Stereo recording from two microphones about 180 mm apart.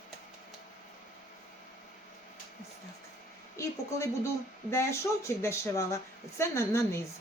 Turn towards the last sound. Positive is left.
turn(degrees=15)  # may be behind; listen again after turning